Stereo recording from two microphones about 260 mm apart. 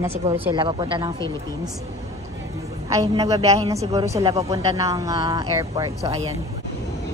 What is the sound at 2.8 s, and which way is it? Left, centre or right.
Speech, centre.